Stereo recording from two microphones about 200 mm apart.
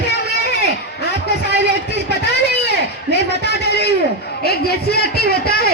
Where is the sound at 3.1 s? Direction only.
55° left (ahead or behind).